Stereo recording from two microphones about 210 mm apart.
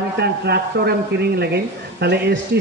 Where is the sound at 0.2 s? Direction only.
50° right (ahead or behind).